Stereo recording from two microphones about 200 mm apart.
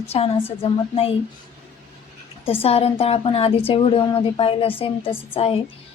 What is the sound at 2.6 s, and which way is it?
A woman's voice, 30° left (ahead or behind).